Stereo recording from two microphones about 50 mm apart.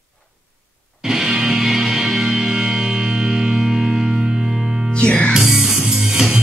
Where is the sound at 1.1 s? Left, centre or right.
Centre.